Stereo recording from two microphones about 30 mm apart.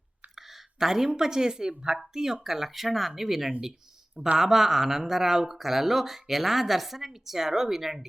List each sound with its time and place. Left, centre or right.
0.3 s speech: centre